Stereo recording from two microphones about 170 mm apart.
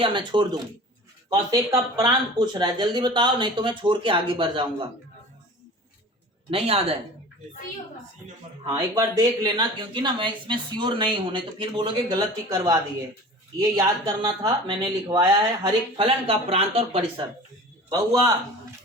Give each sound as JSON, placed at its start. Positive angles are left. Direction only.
{"t": 0.0, "sound": "speech", "side_deg": -25}
{"t": 6.5, "sound": "speech", "side_deg": -35}
{"t": 8.6, "sound": "speech", "side_deg": -25}
{"t": 17.8, "sound": "speech", "side_deg": -20}